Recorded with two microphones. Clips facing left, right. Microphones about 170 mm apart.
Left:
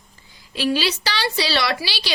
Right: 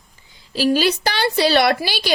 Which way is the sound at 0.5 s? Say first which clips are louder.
Right 5 dB; 45° right (ahead or behind).